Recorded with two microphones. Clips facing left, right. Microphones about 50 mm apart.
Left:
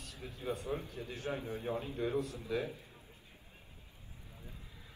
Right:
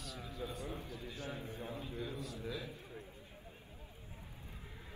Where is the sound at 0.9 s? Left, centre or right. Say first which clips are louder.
Left 5 dB; left.